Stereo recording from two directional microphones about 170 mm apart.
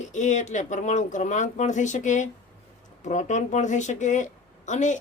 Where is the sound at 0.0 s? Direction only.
45° left (ahead or behind).